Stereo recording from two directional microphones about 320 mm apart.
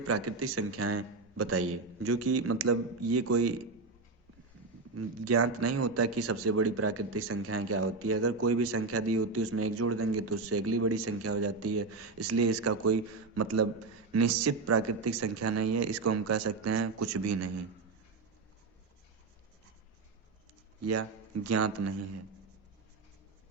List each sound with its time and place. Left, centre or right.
0.1 s a man's voice: right
4.9 s a man's voice: right
20.8 s a man's voice: right